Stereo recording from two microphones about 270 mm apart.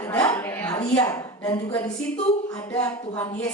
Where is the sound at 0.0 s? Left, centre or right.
Centre.